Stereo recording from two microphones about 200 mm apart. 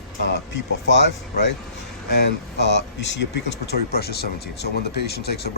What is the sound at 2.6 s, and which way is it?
Speech, 60° left (ahead or behind).